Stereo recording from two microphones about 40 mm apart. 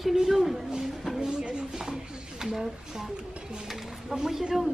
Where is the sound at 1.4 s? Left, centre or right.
Right.